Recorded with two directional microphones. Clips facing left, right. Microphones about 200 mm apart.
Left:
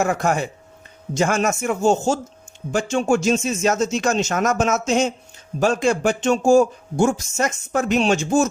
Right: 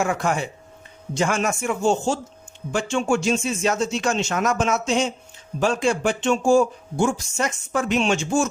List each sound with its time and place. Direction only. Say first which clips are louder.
0.0 s a man's voice: left 3 dB; 40° left (ahead or behind)